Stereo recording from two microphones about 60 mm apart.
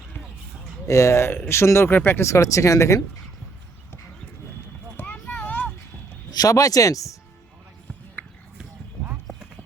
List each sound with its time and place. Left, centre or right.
0.9 s speech: left
2.0 s speech: left
2.2 s speech: left
5.3 s a sound: left
6.3 s speech: left
8.2 s basketball bounce: left